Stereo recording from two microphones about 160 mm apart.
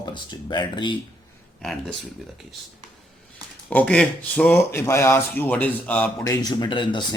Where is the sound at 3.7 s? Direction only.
10° left (ahead or behind).